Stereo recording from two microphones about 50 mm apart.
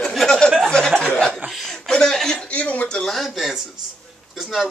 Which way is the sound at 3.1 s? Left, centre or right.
Centre.